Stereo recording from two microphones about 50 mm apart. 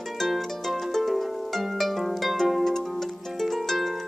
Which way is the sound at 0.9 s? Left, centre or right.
Centre.